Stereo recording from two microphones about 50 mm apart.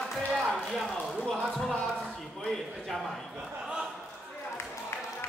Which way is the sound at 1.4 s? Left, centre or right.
Centre.